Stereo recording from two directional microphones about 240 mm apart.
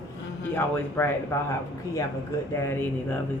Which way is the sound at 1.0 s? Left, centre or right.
Centre.